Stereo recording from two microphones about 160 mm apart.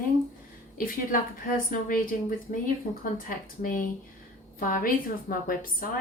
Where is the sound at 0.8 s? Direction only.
60° left (ahead or behind).